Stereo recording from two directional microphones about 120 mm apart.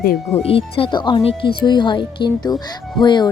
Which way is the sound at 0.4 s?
50° left (ahead or behind).